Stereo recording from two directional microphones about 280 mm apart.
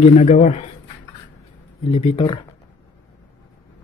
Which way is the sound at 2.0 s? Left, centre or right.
Centre.